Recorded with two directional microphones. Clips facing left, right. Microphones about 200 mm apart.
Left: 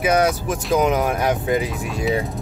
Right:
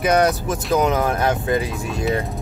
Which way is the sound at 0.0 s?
5° left (ahead or behind).